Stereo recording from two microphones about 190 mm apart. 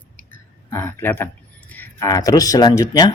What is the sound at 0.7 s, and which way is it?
Speech, 10° left (ahead or behind).